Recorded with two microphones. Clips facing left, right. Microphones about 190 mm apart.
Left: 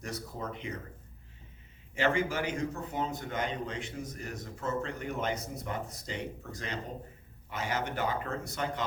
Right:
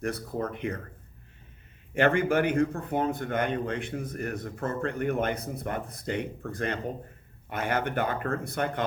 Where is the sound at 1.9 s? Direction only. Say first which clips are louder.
Right 6 dB; 55° right (ahead or behind).